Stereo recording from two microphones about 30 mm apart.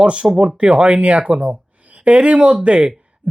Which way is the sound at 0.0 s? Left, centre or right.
Right.